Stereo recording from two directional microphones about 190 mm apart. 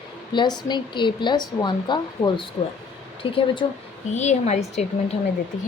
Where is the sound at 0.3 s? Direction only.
20° left (ahead or behind).